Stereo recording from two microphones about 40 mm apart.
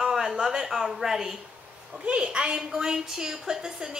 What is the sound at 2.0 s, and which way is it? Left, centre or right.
A woman's voice, right.